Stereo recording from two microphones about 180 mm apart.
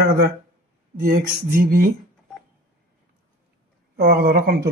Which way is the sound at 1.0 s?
50° right (ahead or behind).